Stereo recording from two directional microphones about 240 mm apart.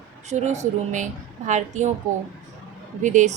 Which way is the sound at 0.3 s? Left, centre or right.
Right.